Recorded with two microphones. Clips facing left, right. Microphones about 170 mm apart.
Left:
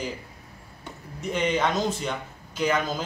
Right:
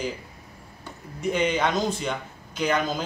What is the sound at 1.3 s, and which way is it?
Speech, centre (ahead or behind).